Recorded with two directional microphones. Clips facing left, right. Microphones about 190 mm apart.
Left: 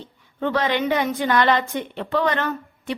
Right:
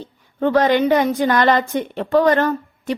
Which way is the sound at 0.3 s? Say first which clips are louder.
Right 7 dB; 45° right (ahead or behind).